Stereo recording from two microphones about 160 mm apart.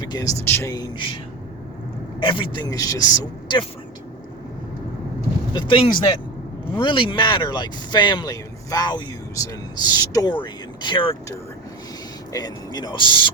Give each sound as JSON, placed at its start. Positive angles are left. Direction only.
{"t": 0.0, "sound": "speech", "side_deg": 25}
{"t": 2.2, "sound": "speech", "side_deg": 30}
{"t": 5.5, "sound": "speech", "side_deg": 30}
{"t": 12.3, "sound": "speech", "side_deg": 25}